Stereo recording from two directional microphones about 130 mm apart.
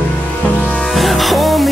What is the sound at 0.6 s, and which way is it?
Music, centre (ahead or behind).